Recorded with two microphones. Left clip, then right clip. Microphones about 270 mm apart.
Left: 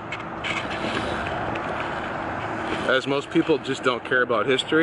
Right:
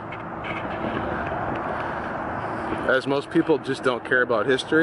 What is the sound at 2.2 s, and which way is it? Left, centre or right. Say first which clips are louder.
Vehicle: even; centre.